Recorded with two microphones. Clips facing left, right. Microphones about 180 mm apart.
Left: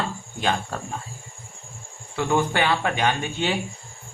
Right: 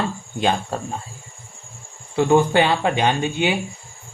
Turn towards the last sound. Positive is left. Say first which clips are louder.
# right 4 dB
turn(degrees=-20)  # may be behind; listen again after turning